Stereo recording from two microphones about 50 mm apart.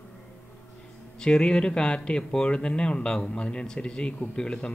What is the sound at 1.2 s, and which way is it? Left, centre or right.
Speech, centre.